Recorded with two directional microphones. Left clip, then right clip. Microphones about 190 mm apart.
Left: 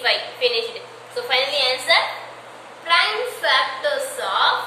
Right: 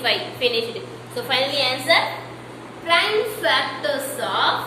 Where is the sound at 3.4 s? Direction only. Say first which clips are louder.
Left 5 dB; 20° right (ahead or behind).